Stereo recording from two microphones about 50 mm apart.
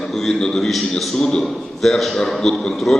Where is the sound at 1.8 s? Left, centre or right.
Centre.